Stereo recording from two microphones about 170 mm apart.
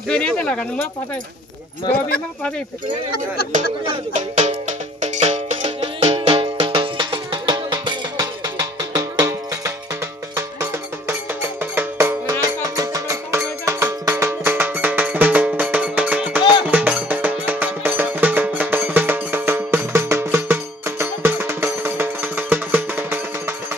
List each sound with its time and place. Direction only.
0.1 s speech: 5° left (ahead or behind)
1.9 s speech: 65° left (ahead or behind)
4.1 s music: 45° right (ahead or behind); by 23.5 s 10° right (ahead or behind)